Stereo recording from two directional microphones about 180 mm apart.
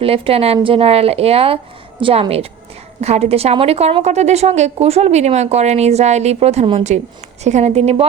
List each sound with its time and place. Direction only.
0.0 s a woman's voice: 30° right (ahead or behind)